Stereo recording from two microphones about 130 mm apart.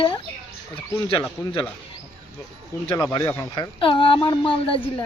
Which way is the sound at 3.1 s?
20° left (ahead or behind).